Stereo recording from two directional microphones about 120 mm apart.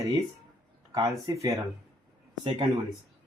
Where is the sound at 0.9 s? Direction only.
30° right (ahead or behind).